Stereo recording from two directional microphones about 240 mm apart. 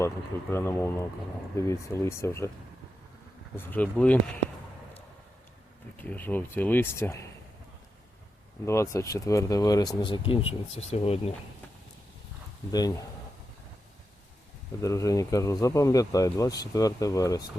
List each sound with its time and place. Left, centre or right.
0.5 s speech: centre
3.5 s speech: centre
6.0 s speech: centre
8.6 s speech: centre
12.7 s speech: centre
14.8 s speech: centre